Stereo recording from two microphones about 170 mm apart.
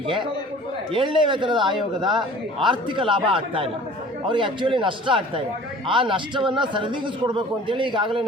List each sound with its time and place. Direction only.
0.9 s a man's voice: 30° right (ahead or behind)